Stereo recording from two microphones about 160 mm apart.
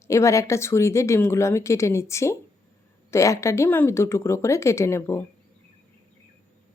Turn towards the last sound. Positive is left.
turn(degrees=15)  # may be behind; listen again after turning